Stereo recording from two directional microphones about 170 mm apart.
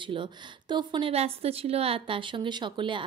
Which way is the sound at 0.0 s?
30° right (ahead or behind).